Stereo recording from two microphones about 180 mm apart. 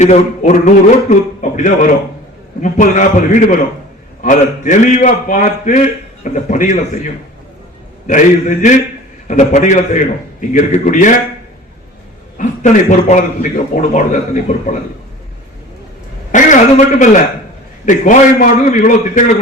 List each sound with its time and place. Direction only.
0.0 s speech: 40° left (ahead or behind)
1.4 s a sound: 45° left (ahead or behind)
2.6 s a man's voice: 45° left (ahead or behind)
12.4 s a man's voice: 45° left (ahead or behind)
16.3 s a man's voice: 45° left (ahead or behind)